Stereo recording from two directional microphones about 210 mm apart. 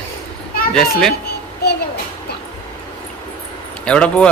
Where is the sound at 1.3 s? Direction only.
50° left (ahead or behind).